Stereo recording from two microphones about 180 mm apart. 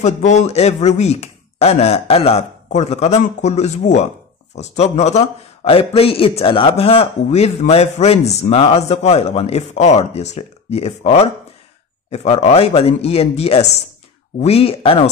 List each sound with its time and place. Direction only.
0.0 s a man's voice: 40° left (ahead or behind)